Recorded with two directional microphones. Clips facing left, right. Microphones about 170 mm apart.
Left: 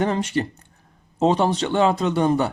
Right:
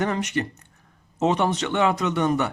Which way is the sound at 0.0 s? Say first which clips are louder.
Left 3 dB; 30° left (ahead or behind).